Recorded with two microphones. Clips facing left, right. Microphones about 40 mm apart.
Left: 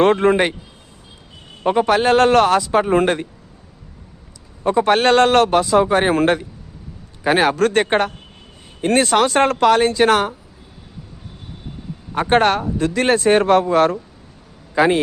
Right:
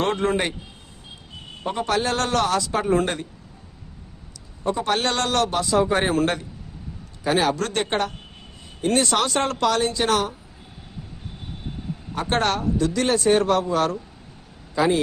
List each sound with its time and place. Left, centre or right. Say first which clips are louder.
0.0 s speech: left 8 dB; left
1.6 s a man's voice: left 10 dB; left
1.9 s speech: left 9 dB; left
4.8 s speech: left 11 dB; left
6.1 s a man's voice: left 6 dB; left
7.3 s a man's voice: left 6 dB; left
12.1 s a man's voice: left 7 dB; left
14.8 s a man's voice: left 5 dB; left